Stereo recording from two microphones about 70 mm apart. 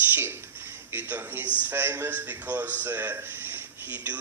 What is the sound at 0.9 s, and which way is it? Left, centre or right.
A man's voice, right.